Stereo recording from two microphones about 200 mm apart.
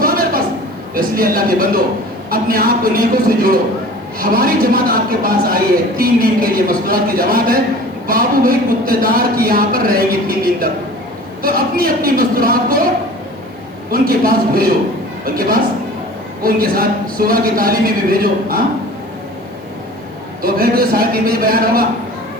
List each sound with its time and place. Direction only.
0.0 s a sound: 45° right (ahead or behind)
0.9 s speech: 45° right (ahead or behind)
13.9 s a man's voice: 45° right (ahead or behind)
20.4 s speech: 45° right (ahead or behind)